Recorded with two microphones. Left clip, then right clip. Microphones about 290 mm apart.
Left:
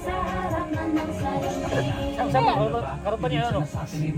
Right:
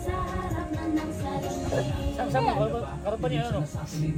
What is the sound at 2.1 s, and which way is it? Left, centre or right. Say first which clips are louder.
Speech: left 4 dB; left.